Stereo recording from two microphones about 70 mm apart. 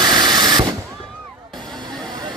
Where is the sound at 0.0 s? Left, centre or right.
Right.